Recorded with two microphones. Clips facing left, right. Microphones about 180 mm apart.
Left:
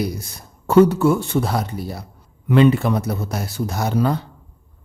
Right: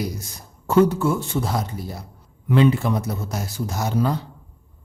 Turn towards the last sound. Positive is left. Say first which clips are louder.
# left 3 dB
turn(degrees=60)  # may be behind; listen again after turning